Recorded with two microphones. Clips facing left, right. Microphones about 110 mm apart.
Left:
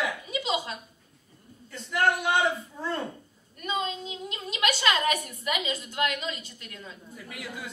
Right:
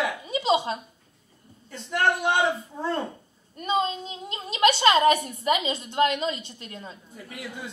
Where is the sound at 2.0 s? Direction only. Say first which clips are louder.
Right 1 dB; 30° right (ahead or behind).